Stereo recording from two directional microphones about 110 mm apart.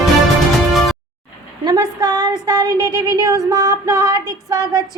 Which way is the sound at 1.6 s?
40° right (ahead or behind).